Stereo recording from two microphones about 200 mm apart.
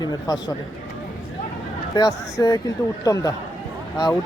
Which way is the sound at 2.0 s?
20° left (ahead or behind).